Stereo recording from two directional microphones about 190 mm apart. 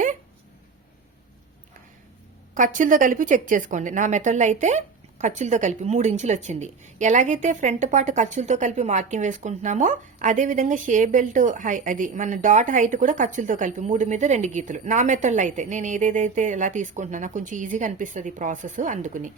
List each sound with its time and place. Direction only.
2.6 s a woman's voice: 45° right (ahead or behind)